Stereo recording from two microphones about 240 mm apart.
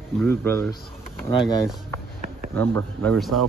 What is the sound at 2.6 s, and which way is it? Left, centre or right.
Speech, centre.